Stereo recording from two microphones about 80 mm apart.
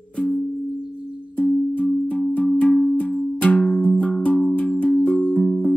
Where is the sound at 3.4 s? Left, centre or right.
Centre.